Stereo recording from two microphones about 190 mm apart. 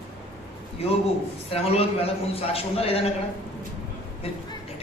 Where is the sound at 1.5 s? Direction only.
30° left (ahead or behind).